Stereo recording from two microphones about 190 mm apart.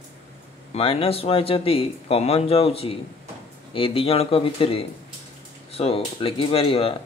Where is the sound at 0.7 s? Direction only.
30° left (ahead or behind).